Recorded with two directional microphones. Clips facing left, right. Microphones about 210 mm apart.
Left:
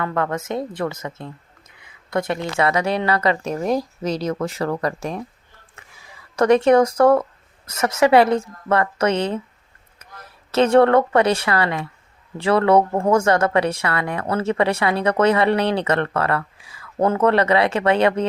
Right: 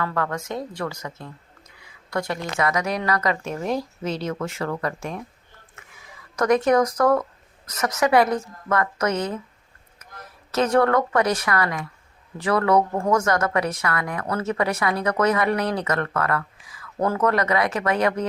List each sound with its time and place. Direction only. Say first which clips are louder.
0.0 s speech: left 3 dB; 20° left (ahead or behind)
6.3 s speech: left 4 dB; 30° left (ahead or behind)
10.0 s a sound: left 2 dB; 30° left (ahead or behind)
10.5 s speech: left 5 dB; 25° left (ahead or behind)